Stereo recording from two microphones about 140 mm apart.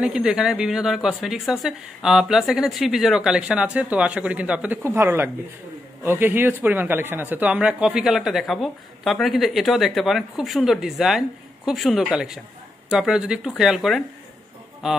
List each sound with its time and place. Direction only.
0.0 s speech: 5° right (ahead or behind)